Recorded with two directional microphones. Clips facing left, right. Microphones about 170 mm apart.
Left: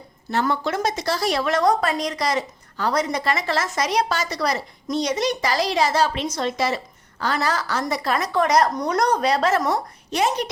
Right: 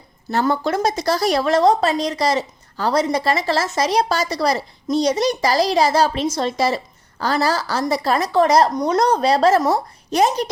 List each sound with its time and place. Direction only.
0.3 s a woman's voice: 40° right (ahead or behind)